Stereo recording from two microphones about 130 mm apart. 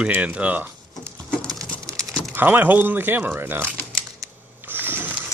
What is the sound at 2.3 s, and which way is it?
Speech, 15° right (ahead or behind).